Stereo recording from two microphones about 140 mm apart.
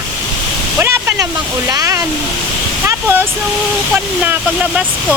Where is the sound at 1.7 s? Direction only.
25° right (ahead or behind).